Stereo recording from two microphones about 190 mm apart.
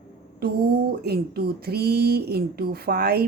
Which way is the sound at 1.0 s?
55° right (ahead or behind).